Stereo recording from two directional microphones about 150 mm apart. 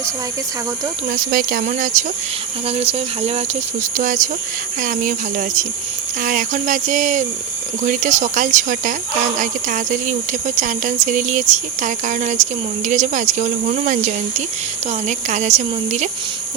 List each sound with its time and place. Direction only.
1.1 s speech: 80° right; by 2.0 s 55° right (ahead or behind)
2.6 s speech: 45° right (ahead or behind)
3.9 s cricket: 60° right (ahead or behind)
12.9 s speech: 55° right (ahead or behind)